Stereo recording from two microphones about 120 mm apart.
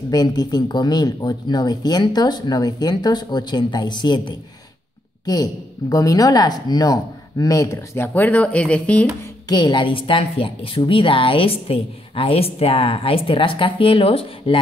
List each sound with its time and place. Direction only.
0.1 s a woman's voice: 35° left (ahead or behind); by 9.0 s 10° left (ahead or behind)
9.5 s a woman's voice: 40° left (ahead or behind)